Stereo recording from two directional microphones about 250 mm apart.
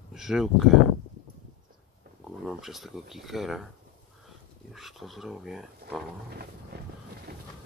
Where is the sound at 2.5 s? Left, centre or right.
Centre.